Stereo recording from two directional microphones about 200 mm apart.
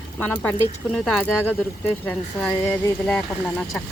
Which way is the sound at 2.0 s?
5° left (ahead or behind).